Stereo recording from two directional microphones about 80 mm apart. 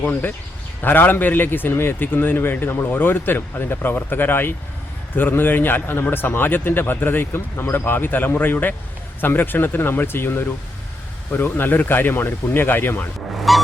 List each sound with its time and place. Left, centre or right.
0.0 s speech: left
13.5 s honk: centre